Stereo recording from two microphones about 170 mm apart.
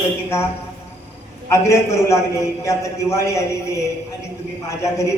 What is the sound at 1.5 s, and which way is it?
Speech, 15° left (ahead or behind).